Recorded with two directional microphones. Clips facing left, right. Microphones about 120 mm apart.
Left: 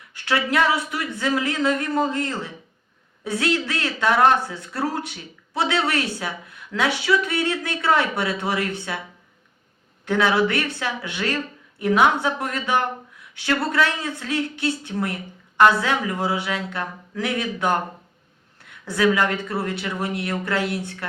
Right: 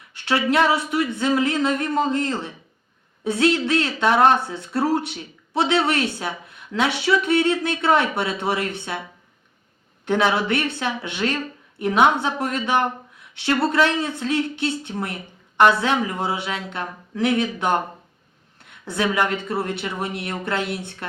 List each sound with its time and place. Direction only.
0.1 s speech: 25° right (ahead or behind)
10.1 s speech: 25° right (ahead or behind)